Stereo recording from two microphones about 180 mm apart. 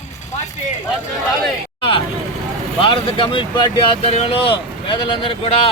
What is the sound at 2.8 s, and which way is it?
Speech, 30° left (ahead or behind).